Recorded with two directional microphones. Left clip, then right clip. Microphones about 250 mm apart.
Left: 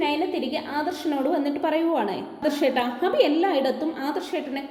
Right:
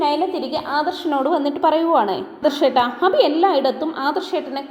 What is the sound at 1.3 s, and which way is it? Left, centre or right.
A woman's voice, centre.